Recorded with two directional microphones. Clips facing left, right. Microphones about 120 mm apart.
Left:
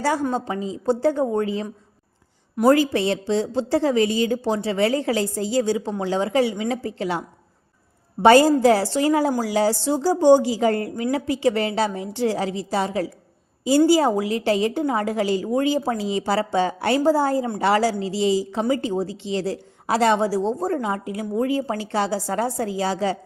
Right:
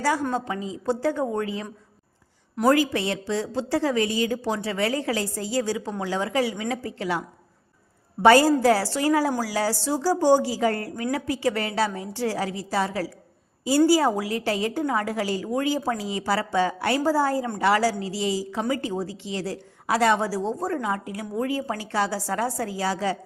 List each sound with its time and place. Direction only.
0.3 s a woman's voice: 30° left (ahead or behind)
2.6 s a woman's voice: 30° left (ahead or behind)